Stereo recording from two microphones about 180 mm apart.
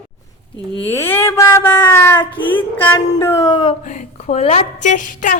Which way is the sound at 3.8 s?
45° left (ahead or behind).